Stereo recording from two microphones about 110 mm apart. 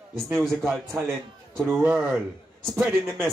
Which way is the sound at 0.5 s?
Centre (ahead or behind).